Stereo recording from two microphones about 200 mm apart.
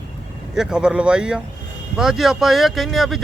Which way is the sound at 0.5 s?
5° right (ahead or behind).